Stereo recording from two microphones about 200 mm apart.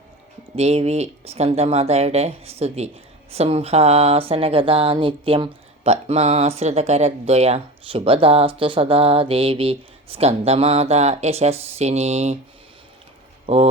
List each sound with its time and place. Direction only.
0.5 s speech: 30° right (ahead or behind)